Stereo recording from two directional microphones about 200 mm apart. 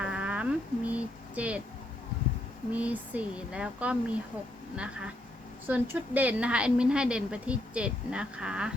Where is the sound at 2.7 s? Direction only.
10° right (ahead or behind).